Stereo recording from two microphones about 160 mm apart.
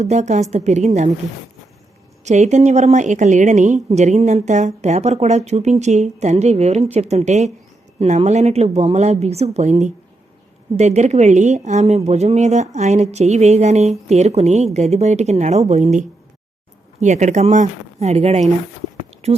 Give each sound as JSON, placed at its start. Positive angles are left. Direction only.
{"t": 0.0, "sound": "speech", "side_deg": -45}
{"t": 2.2, "sound": "speech", "side_deg": -45}